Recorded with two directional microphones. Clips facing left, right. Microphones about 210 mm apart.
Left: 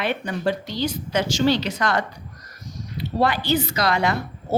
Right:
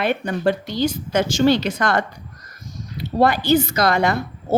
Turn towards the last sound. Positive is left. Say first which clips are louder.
# right 3 dB
turn(degrees=-45)  # may be behind; listen again after turning